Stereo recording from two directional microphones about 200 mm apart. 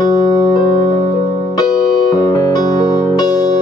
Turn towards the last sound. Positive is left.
turn(degrees=20)  # may be behind; listen again after turning